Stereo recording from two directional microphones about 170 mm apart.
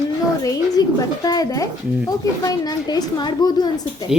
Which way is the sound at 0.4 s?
20° left (ahead or behind).